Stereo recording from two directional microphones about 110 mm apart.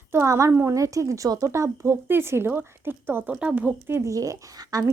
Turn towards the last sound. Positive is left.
turn(degrees=-30)  # may be behind; listen again after turning